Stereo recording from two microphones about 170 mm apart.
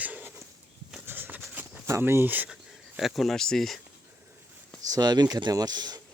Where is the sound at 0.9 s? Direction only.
10° right (ahead or behind).